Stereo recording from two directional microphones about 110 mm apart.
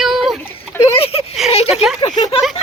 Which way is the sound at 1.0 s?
65° left (ahead or behind).